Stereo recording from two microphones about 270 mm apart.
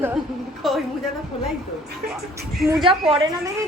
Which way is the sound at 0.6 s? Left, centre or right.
Centre.